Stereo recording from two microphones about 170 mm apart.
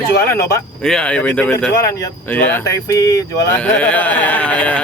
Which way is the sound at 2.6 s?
20° left (ahead or behind).